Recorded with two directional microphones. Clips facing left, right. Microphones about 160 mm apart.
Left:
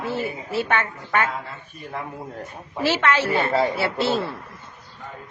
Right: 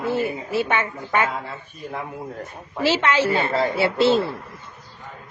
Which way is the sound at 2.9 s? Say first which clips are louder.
Right 1 dB; 15° right (ahead or behind).